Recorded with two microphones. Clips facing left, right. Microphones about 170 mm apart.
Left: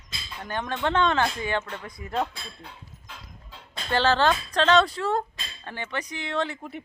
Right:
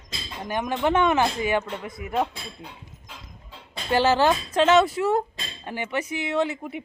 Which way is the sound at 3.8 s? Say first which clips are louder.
Right 2 dB; 15° right (ahead or behind).